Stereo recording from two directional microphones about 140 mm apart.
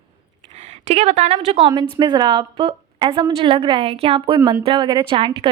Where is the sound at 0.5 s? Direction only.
55° right (ahead or behind).